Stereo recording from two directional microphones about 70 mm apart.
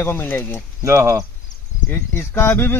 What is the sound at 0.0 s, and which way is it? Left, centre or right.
Speech, left.